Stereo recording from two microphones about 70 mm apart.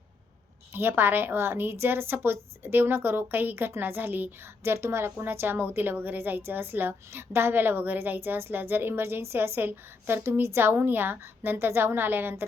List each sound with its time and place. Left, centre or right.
0.7 s a woman's voice: right